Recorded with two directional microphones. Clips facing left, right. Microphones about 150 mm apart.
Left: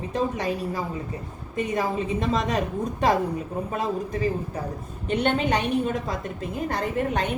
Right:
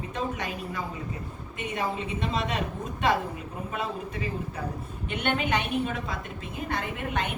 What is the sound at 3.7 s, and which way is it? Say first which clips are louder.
A woman's voice: left 3 dB; 40° left (ahead or behind).